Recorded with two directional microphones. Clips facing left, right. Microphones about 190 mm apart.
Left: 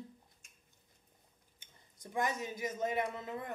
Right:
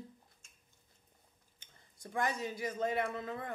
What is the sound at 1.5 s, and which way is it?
Speech, 15° left (ahead or behind).